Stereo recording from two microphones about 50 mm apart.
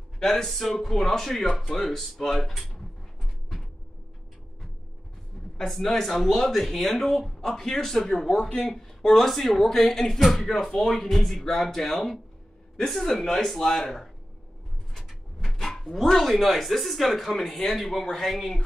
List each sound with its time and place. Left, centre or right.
0.2 s speech: centre
5.6 s speech: centre